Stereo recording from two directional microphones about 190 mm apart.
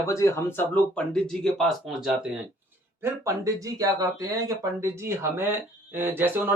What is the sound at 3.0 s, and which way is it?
Speech, 15° right (ahead or behind).